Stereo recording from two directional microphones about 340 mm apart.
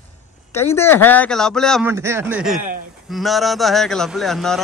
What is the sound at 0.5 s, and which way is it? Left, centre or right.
Speech, centre.